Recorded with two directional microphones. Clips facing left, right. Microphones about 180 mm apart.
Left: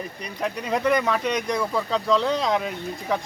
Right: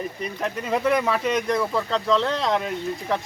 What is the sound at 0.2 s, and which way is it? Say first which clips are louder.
Speech: right 1 dB; centre (ahead or behind).